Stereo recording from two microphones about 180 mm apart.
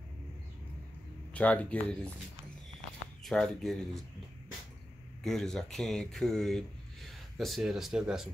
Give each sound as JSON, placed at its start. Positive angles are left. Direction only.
{"t": 1.3, "sound": "speech", "side_deg": 10}
{"t": 3.3, "sound": "speech", "side_deg": 0}
{"t": 5.2, "sound": "speech", "side_deg": 0}